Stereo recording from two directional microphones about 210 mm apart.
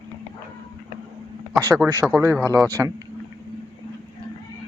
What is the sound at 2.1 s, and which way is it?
Speech, 15° right (ahead or behind).